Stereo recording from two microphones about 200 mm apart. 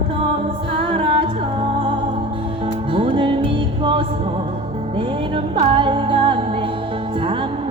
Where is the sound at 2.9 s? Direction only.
25° right (ahead or behind).